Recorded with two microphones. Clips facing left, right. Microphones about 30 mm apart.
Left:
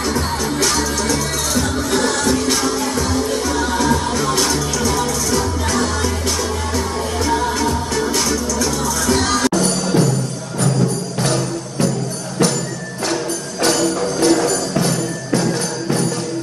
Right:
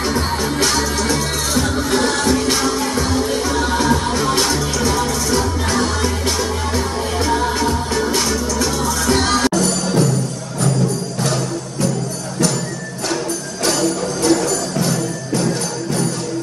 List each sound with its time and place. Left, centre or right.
0.7 s music: centre
7.2 s music: centre
9.5 s music: centre
13.9 s music: centre